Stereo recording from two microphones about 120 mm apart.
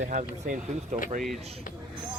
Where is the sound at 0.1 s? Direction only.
90° right.